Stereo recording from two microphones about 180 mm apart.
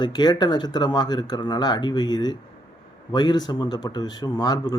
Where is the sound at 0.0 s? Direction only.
25° left (ahead or behind).